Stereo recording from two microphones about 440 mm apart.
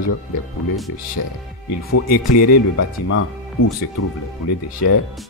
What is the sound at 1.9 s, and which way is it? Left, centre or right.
Speech, left.